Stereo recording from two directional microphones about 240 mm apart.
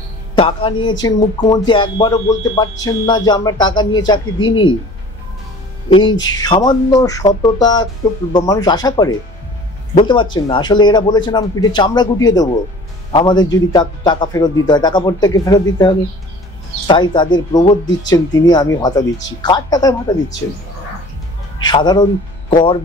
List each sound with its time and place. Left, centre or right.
0.4 s speech: left
5.9 s speech: left
21.6 s speech: centre